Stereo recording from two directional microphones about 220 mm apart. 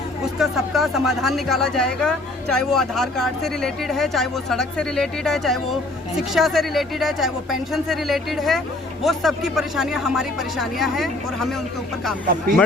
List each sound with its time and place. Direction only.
0.3 s speech: centre (ahead or behind)
12.2 s speech: 40° right (ahead or behind)